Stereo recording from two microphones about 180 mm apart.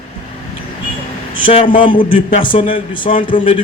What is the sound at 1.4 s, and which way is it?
Speech, 30° left (ahead or behind).